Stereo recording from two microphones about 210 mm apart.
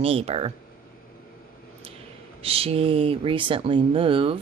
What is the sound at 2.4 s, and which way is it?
A woman's voice, 25° right (ahead or behind).